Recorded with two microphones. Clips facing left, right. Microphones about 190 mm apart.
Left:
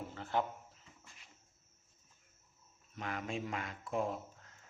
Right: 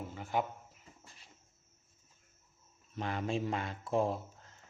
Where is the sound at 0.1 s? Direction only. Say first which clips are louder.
Right 1 dB; 10° right (ahead or behind).